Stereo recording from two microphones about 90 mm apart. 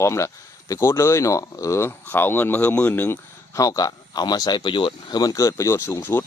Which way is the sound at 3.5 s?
40° left (ahead or behind).